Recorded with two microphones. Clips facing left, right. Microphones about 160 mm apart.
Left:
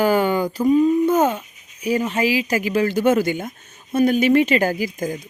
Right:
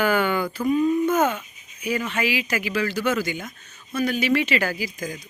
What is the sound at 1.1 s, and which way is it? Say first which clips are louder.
Speech: left 4 dB; 35° left (ahead or behind).